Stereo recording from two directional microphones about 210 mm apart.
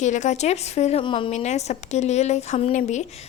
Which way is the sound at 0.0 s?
35° left (ahead or behind).